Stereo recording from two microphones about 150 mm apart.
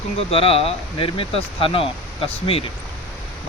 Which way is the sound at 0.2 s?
40° left (ahead or behind).